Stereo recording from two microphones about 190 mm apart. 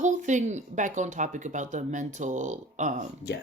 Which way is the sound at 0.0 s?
40° right (ahead or behind).